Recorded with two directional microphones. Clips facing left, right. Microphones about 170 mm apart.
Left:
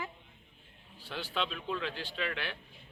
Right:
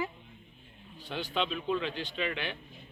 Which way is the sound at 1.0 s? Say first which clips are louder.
Right 3 dB; 5° left (ahead or behind).